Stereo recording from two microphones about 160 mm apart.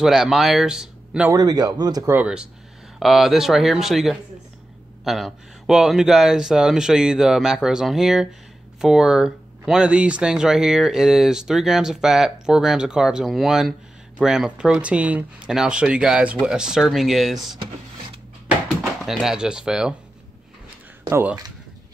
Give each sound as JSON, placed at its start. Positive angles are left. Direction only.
{"t": 0.0, "sound": "speech", "side_deg": -5}
{"t": 1.3, "sound": "speech", "side_deg": -25}
{"t": 2.1, "sound": "speech", "side_deg": -5}
{"t": 19.0, "sound": "speech", "side_deg": 0}
{"t": 21.1, "sound": "speech", "side_deg": -10}